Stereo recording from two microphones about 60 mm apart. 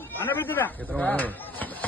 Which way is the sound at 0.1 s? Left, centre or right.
Left.